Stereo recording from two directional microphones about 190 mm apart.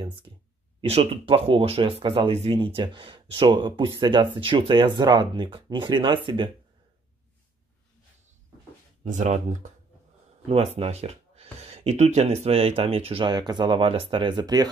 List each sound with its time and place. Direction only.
0.3 s a sound: 25° right (ahead or behind)
0.7 s speech: 30° right (ahead or behind)
9.0 s speech: 40° right (ahead or behind); by 14.7 s 20° right (ahead or behind)